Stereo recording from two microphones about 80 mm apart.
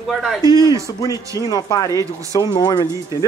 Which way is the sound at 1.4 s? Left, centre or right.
Left.